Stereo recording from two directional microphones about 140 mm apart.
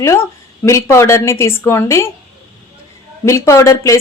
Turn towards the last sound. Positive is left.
turn(degrees=20)  # may be behind; listen again after turning